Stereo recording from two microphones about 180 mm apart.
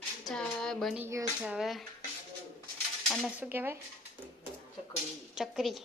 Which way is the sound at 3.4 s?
10° right (ahead or behind).